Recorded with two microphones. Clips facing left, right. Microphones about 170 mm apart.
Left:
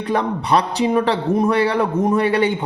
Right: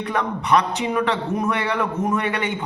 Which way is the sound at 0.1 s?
30° left (ahead or behind).